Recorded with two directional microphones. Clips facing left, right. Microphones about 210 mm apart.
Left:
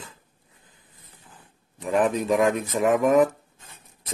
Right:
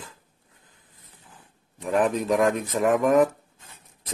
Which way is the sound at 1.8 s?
Centre (ahead or behind).